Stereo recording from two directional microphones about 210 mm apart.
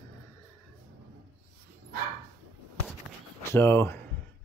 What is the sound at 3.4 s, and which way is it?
Speech, 10° left (ahead or behind).